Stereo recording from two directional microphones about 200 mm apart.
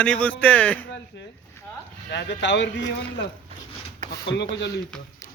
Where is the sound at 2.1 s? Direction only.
60° left (ahead or behind).